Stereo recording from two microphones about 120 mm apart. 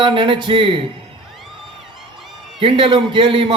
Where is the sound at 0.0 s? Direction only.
45° right (ahead or behind).